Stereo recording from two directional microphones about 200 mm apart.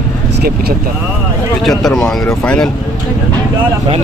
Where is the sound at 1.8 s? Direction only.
Centre (ahead or behind).